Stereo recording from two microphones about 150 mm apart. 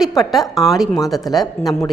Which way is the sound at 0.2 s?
Centre (ahead or behind).